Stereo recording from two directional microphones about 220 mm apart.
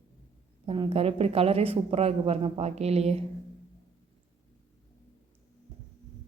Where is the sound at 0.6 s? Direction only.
25° right (ahead or behind).